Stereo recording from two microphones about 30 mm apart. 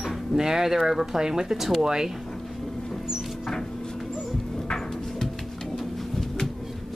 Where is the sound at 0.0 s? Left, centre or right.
Centre.